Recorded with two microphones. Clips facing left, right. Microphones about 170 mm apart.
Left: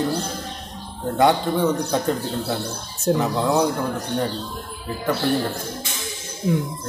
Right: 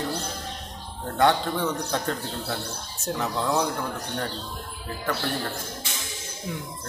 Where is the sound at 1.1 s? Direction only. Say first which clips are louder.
Left 4 dB; 15° left (ahead or behind).